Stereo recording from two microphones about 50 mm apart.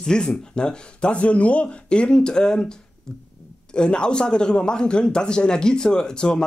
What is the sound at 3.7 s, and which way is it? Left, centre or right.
Speech, centre.